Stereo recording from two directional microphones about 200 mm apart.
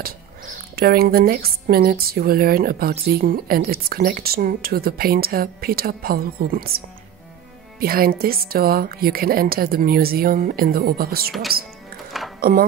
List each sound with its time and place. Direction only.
0.7 s a woman's voice: 50° right (ahead or behind)
7.8 s a woman's voice: 50° right (ahead or behind)
12.4 s speech: 45° right (ahead or behind)